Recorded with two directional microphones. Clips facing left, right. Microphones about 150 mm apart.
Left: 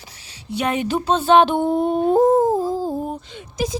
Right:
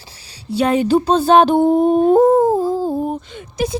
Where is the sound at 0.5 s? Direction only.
35° right (ahead or behind); by 2.9 s 65° right (ahead or behind).